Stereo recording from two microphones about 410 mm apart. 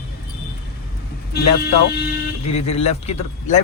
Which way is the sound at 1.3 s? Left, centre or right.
Left.